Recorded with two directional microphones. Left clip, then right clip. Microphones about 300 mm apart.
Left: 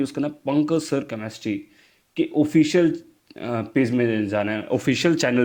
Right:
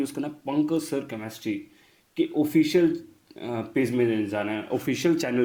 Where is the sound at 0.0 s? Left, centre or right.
Left.